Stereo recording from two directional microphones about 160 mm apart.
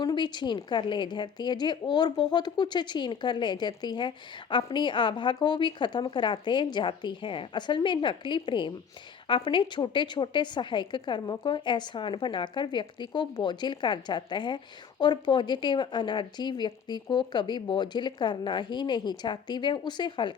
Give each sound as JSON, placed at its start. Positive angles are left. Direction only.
{"t": 0.0, "sound": "a woman's voice", "side_deg": 30}